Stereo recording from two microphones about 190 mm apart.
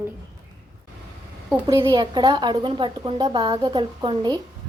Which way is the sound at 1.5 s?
15° right (ahead or behind).